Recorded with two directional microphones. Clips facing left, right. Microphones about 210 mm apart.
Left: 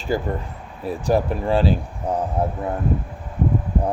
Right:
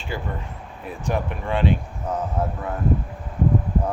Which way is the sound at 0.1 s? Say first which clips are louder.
Left 7 dB; 40° left (ahead or behind).